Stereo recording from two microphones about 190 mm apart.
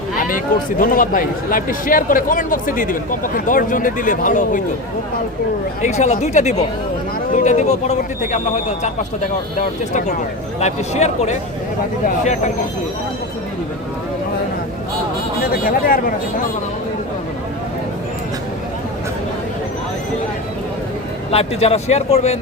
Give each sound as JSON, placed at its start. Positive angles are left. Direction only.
{"t": 0.2, "sound": "speech", "side_deg": 45}
{"t": 5.8, "sound": "speech", "side_deg": 35}
{"t": 21.2, "sound": "speech", "side_deg": 30}